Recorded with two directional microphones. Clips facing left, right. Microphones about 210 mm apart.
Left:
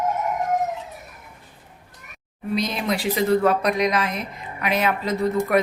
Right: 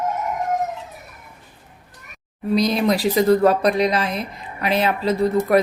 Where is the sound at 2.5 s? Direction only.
35° right (ahead or behind).